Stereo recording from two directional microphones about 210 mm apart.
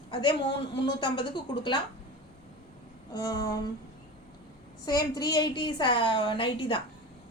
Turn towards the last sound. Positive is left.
turn(degrees=25)  # may be behind; listen again after turning